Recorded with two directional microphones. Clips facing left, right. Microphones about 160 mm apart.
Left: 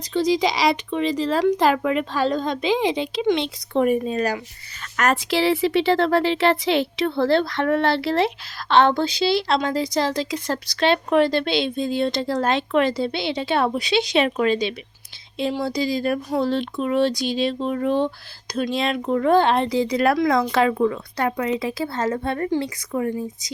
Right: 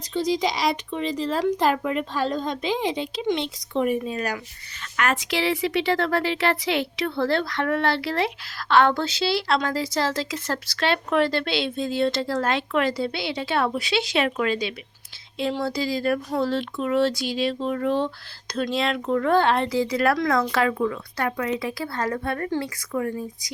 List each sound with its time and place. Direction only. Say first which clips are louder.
0.1 s speech: left 4 dB; 75° left (ahead or behind)
3.8 s speech: left 4 dB; 45° left (ahead or behind); by 23.5 s 20° left (ahead or behind)